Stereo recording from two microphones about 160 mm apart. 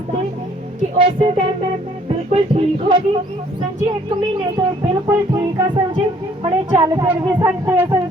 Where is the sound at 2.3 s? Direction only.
35° right (ahead or behind).